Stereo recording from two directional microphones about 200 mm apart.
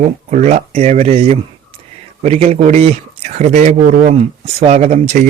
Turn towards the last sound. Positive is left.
turn(degrees=-35)  # may be behind; listen again after turning